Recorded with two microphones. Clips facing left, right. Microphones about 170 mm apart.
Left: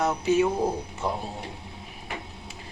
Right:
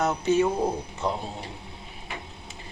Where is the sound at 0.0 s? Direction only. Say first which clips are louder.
Even; 10° left (ahead or behind).